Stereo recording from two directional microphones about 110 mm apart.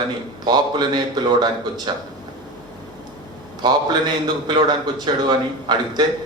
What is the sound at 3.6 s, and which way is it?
A man's voice, 40° right (ahead or behind).